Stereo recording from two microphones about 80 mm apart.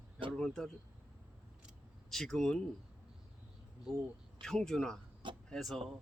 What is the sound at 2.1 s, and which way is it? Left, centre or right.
Speech, centre.